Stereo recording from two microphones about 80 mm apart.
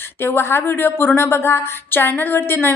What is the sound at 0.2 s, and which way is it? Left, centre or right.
A woman's voice, left.